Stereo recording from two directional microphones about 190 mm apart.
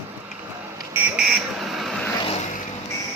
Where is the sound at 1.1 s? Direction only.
Centre (ahead or behind).